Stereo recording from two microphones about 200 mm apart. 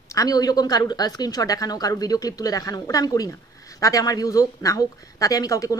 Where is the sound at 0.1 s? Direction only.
20° left (ahead or behind).